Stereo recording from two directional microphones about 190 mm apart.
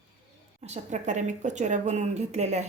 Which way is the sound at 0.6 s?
35° right (ahead or behind).